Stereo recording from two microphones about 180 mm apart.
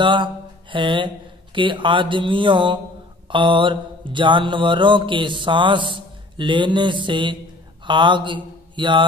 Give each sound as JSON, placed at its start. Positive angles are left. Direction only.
{"t": 0.0, "sound": "speech", "side_deg": -25}
{"t": 3.3, "sound": "mantra", "side_deg": -25}
{"t": 7.8, "sound": "speech", "side_deg": -25}